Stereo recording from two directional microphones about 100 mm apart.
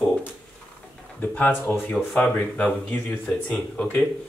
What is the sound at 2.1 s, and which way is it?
Speech, 15° left (ahead or behind).